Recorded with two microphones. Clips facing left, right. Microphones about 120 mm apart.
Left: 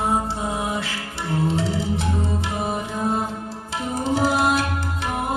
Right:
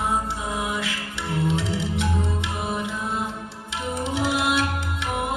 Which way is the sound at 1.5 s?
35° left (ahead or behind).